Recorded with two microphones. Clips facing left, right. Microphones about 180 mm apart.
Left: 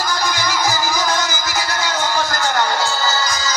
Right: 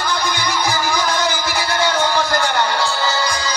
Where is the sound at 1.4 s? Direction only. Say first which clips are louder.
Right 2 dB; 30° right (ahead or behind).